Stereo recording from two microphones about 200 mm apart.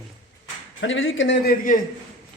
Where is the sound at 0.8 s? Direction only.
70° left (ahead or behind).